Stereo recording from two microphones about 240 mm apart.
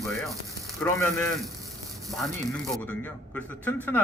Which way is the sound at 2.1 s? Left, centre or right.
Centre.